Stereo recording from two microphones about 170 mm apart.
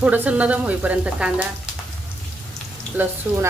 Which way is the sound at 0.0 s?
10° right (ahead or behind).